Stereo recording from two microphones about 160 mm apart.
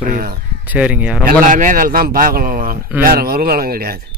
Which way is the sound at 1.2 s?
55° right (ahead or behind).